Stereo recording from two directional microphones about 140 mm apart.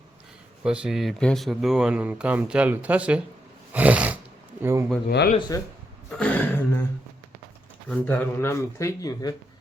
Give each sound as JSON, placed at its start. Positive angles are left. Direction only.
{"t": 0.6, "sound": "speech", "side_deg": -5}
{"t": 3.7, "sound": "sneeze", "side_deg": -10}
{"t": 4.6, "sound": "speech", "side_deg": -20}
{"t": 5.5, "sound": "speech", "side_deg": 25}
{"t": 6.1, "sound": "throat clearing", "side_deg": 10}
{"t": 7.9, "sound": "speech", "side_deg": 10}